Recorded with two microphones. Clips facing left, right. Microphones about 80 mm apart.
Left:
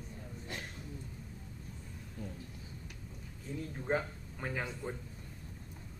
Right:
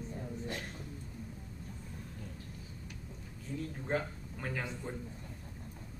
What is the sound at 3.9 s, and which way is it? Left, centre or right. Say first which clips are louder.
Speech: left 2 dB; centre.